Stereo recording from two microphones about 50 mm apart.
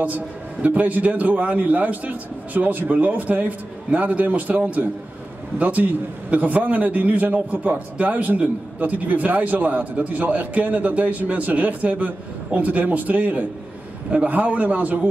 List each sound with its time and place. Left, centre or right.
0.0 s a man's voice: right